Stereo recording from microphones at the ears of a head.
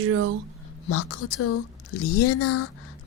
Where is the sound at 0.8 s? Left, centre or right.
Left.